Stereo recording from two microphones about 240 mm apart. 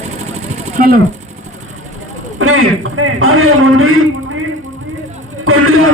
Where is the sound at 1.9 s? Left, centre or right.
Right.